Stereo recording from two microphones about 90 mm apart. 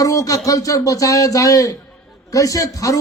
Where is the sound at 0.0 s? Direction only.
40° left (ahead or behind).